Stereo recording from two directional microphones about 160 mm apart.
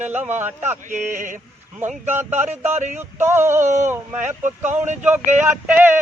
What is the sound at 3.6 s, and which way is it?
Speech, 50° right (ahead or behind).